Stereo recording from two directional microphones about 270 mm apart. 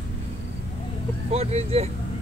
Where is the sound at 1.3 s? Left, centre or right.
Right.